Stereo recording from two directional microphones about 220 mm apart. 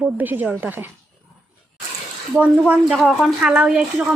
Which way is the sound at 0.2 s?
10° right (ahead or behind).